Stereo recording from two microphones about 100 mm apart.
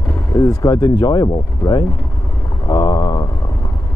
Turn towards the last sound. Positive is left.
turn(degrees=40)  # may be behind; listen again after turning